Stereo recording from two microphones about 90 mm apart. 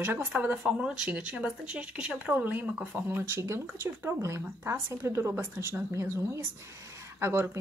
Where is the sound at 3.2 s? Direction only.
30° right (ahead or behind).